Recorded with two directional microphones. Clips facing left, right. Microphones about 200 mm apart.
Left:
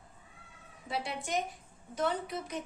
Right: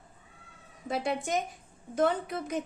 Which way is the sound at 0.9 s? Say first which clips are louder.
Right 6 dB; 45° right (ahead or behind).